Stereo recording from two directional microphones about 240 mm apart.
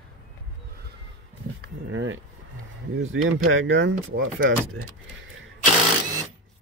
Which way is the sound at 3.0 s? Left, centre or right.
Right.